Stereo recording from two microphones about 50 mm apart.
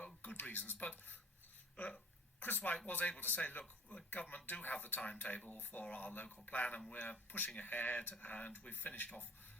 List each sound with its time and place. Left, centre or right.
0.2 s music: left
0.9 s speech: left
1.7 s speech: left
2.4 s speech: left
3.6 s speech: left
4.1 s speech: left